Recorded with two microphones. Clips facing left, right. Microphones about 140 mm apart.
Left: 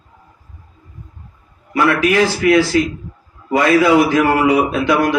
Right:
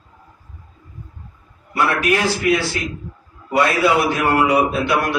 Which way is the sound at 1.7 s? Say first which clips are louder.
Left 4 dB; 90° left.